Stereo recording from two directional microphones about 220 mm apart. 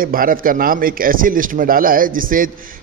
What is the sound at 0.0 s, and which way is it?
A man's voice, 40° right (ahead or behind).